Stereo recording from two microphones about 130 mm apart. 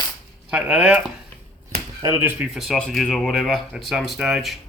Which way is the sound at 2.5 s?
Centre (ahead or behind).